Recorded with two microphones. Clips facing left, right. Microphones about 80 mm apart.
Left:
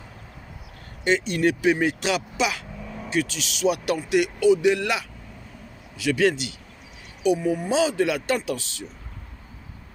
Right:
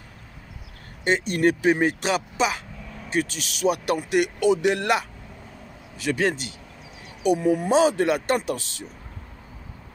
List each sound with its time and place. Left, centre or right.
1.0 s speech: right
7.2 s speech: right